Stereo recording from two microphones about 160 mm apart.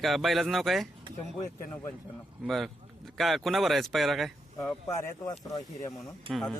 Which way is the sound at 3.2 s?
Centre (ahead or behind).